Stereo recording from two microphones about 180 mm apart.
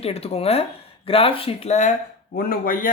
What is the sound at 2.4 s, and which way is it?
Speech, 55° left (ahead or behind).